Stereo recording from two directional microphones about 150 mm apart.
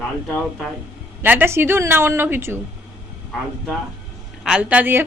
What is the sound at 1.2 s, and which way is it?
A woman's voice, 15° right (ahead or behind).